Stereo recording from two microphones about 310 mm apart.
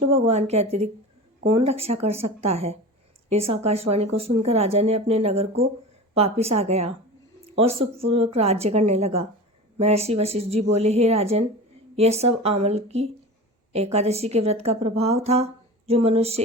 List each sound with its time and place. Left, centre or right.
0.0 s a woman's voice: centre